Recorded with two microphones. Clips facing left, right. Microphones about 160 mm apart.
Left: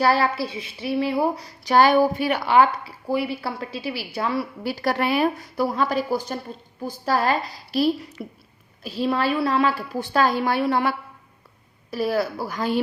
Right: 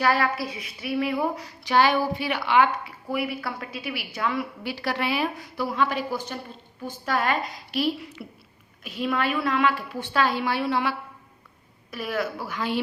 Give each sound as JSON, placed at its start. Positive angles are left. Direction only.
{"t": 0.0, "sound": "a woman's voice", "side_deg": 30}
{"t": 11.9, "sound": "a woman's voice", "side_deg": 35}